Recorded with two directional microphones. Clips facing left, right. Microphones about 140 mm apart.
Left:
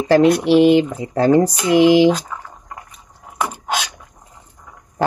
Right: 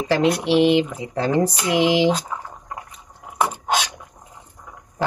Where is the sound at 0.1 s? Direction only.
45° left (ahead or behind).